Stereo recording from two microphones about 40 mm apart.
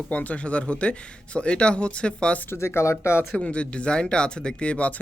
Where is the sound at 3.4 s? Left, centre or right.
Left.